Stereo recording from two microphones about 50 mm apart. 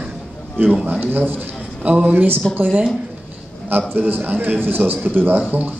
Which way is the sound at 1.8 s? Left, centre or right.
Right.